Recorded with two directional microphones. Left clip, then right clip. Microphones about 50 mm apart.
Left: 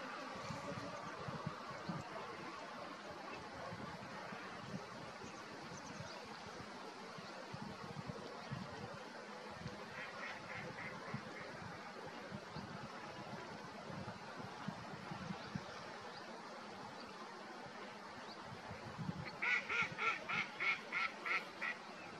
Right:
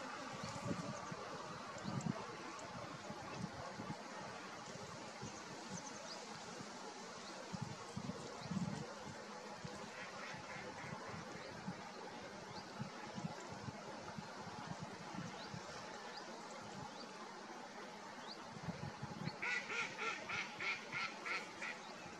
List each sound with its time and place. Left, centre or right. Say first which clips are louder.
19.4 s duck: left 4 dB; centre